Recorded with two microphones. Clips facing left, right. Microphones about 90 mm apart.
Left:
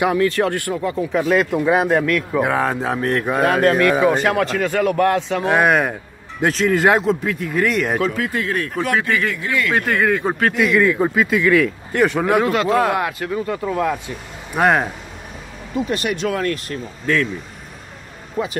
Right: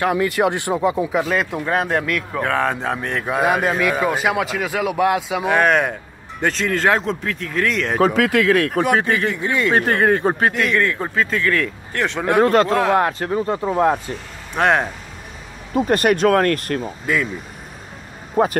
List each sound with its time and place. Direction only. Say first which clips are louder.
0.1 s speech: left 1 dB; 10° right (ahead or behind)
1.1 s speech: left 3 dB; centre (ahead or behind)
5.5 s speech: even; 5° left (ahead or behind)
8.2 s speech: right 6 dB; 90° right
9.0 s speech: right 1 dB; 25° right (ahead or behind)
9.8 s speech: right 2 dB; 40° right (ahead or behind)
10.5 s speech: left 3 dB; 5° left (ahead or behind)
12.4 s speech: right 7 dB; 40° right (ahead or behind)
12.6 s speech: left 1 dB; 5° left (ahead or behind)
12.9 s speech: right 4 dB; 40° right (ahead or behind)
14.5 s speech: left 1 dB; 5° left (ahead or behind)
15.7 s speech: right 5 dB; 45° right (ahead or behind)
17.0 s speech: left 4 dB; 10° right (ahead or behind)
18.4 s speech: right 6 dB; 40° right (ahead or behind)